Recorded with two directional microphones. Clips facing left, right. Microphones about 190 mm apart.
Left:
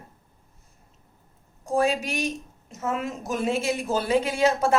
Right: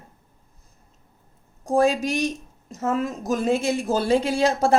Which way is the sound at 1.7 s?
35° right (ahead or behind).